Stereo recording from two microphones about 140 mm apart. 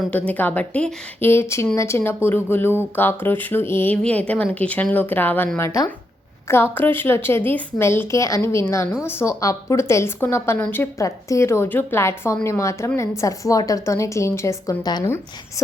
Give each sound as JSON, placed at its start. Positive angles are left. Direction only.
{"t": 0.1, "sound": "a woman's voice", "side_deg": 10}